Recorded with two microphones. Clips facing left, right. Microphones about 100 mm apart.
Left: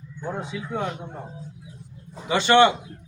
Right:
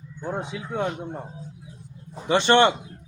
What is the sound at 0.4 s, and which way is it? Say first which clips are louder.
Speech: left 1 dB; 20° right (ahead or behind).